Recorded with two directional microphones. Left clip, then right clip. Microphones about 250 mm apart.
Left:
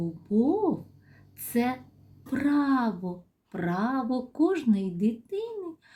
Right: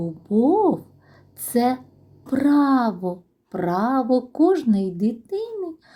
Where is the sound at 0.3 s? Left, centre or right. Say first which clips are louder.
Right 8 dB; centre.